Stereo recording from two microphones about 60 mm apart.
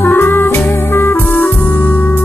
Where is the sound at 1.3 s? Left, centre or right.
Left.